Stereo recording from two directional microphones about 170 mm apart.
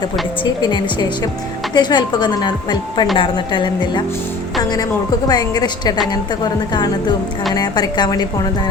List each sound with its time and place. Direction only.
0.4 s a woman's voice: 25° left (ahead or behind)
5.3 s a woman's voice: 25° left (ahead or behind)